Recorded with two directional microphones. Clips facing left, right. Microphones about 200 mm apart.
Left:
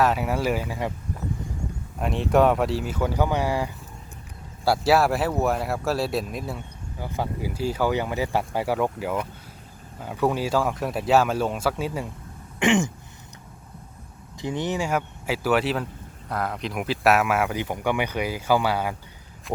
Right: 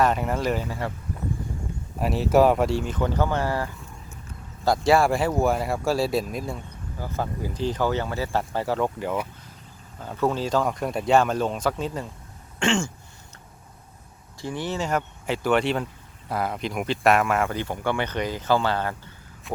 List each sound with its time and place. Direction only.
0.0 s speech: 5° left (ahead or behind)
2.0 s speech: 5° right (ahead or behind)
7.0 s speech: 15° left (ahead or behind)
12.5 s throat clearing: 20° left (ahead or behind)
14.3 s speech: 20° left (ahead or behind)
19.5 s speech: centre (ahead or behind)